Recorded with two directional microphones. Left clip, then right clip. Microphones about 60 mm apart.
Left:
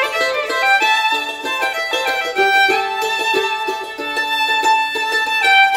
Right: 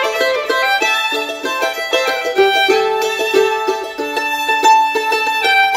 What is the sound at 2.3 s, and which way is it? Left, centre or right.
Music, left.